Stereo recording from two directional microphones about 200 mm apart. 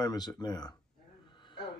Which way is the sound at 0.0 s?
20° left (ahead or behind).